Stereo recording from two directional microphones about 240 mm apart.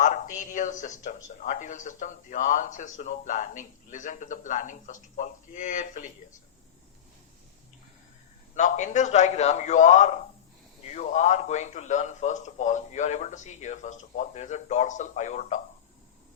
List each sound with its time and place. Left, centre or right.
0.0 s speech: left
8.5 s a man's voice: left